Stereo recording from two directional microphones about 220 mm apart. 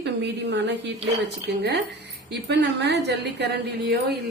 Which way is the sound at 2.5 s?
50° right (ahead or behind).